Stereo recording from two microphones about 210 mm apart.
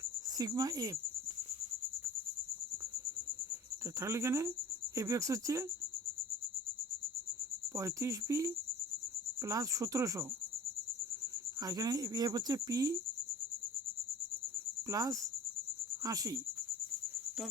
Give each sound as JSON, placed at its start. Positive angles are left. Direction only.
{"t": 0.3, "sound": "speech", "side_deg": -20}
{"t": 4.0, "sound": "speech", "side_deg": -15}
{"t": 7.8, "sound": "speech", "side_deg": -15}
{"t": 11.6, "sound": "speech", "side_deg": -15}
{"t": 14.8, "sound": "speech", "side_deg": -15}